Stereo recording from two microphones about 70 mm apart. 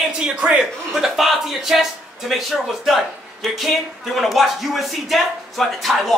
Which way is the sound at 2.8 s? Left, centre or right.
Centre.